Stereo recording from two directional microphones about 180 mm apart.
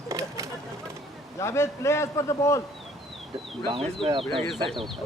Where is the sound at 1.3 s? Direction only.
15° left (ahead or behind).